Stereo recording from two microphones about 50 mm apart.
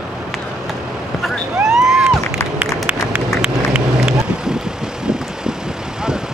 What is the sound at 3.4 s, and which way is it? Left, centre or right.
Vehicle, centre.